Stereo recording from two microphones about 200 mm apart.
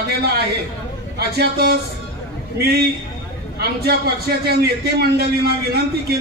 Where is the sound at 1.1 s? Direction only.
50° right (ahead or behind).